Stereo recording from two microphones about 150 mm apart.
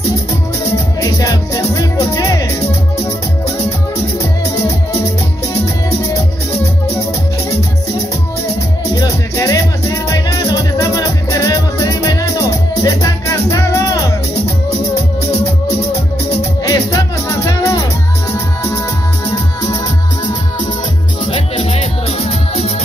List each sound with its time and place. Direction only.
1.1 s music: 25° left (ahead or behind)
8.9 s music: 25° left (ahead or behind)
16.6 s music: 25° left (ahead or behind)
21.3 s music: 40° left (ahead or behind)